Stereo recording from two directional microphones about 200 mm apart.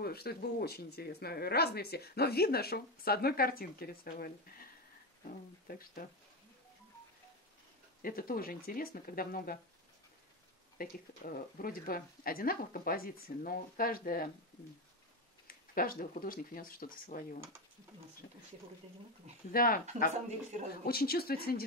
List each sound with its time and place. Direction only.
0.0 s speech: 50° left (ahead or behind)
5.7 s speech: 45° left (ahead or behind)
8.0 s speech: 45° left (ahead or behind)
10.8 s speech: 45° left (ahead or behind)
15.4 s speech: 45° left (ahead or behind)
19.5 s speech: 45° left (ahead or behind)
20.8 s speech: 50° left (ahead or behind)